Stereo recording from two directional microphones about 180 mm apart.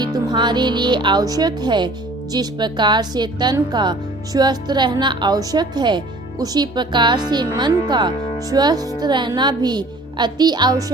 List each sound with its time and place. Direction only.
0.0 s speech: 25° right (ahead or behind)